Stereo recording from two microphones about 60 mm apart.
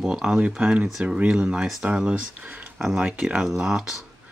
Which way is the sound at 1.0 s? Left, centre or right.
Centre.